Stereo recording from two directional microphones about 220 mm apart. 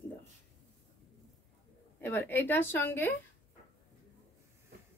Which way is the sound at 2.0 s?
10° left (ahead or behind).